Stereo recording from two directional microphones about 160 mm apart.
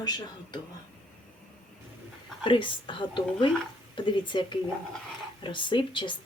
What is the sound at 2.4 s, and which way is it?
Speech, 30° left (ahead or behind).